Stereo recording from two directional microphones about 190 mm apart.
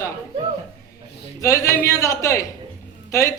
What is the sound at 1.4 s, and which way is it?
A woman's voice, 15° left (ahead or behind).